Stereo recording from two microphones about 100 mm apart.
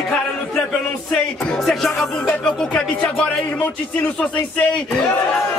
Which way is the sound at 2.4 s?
10° left (ahead or behind).